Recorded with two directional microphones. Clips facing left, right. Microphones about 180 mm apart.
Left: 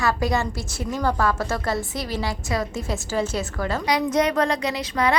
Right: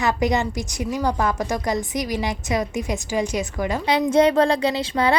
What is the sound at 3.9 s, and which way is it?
A woman's voice, 30° right (ahead or behind).